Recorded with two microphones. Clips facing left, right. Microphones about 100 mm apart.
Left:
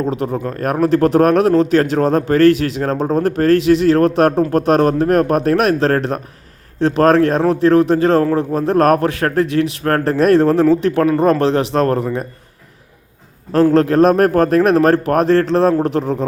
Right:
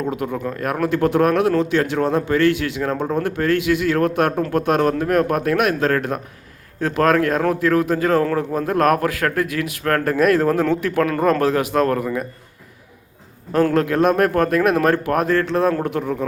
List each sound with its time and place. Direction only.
0.0 s a man's voice: 30° left (ahead or behind)
13.7 s a man's voice: 35° left (ahead or behind)